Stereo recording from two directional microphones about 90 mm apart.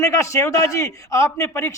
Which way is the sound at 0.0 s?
35° left (ahead or behind).